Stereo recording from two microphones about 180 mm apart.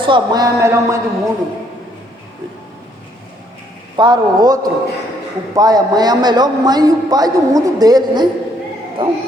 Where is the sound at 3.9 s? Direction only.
25° right (ahead or behind).